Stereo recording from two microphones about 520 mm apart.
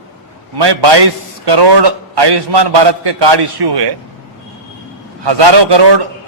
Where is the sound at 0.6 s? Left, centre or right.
Right.